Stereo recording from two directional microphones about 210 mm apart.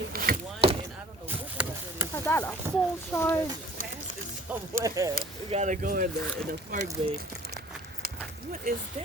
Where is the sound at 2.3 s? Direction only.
10° left (ahead or behind).